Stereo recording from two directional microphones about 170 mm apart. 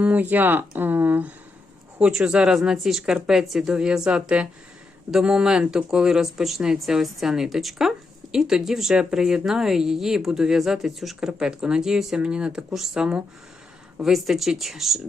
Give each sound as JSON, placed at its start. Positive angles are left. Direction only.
{"t": 0.0, "sound": "speech", "side_deg": -10}